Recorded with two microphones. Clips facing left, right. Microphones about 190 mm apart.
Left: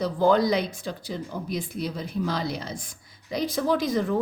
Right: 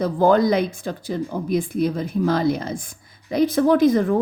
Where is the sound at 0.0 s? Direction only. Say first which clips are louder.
Right 4 dB; 50° right (ahead or behind).